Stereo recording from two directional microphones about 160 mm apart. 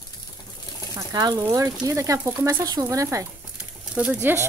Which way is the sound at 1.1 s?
25° right (ahead or behind).